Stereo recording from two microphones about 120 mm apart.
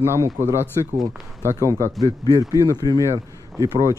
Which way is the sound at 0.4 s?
20° right (ahead or behind).